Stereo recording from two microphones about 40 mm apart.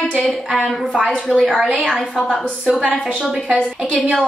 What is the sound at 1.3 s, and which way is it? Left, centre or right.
Speech, right.